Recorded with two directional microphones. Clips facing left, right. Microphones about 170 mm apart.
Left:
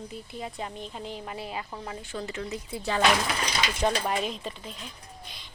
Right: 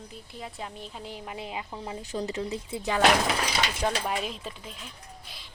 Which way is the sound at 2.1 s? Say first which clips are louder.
Right 4 dB; 35° right (ahead or behind).